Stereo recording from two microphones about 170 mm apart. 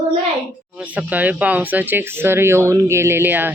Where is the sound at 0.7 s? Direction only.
5° right (ahead or behind).